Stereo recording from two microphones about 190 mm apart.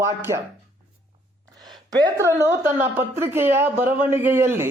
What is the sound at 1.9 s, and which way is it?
A woman's voice, 15° right (ahead or behind).